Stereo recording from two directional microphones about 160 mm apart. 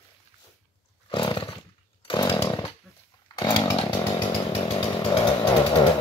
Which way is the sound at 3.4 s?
25° left (ahead or behind).